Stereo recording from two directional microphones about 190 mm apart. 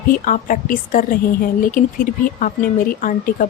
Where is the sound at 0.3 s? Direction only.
45° left (ahead or behind).